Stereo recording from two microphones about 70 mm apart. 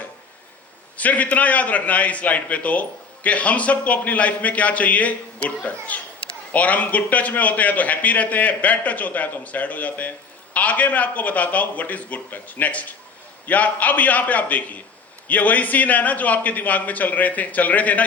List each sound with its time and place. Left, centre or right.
0.9 s a man's voice: left